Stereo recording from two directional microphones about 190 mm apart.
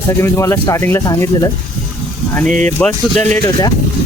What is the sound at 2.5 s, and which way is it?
Speech, 40° right (ahead or behind).